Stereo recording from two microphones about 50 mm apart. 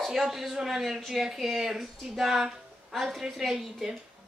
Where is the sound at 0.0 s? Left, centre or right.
Centre.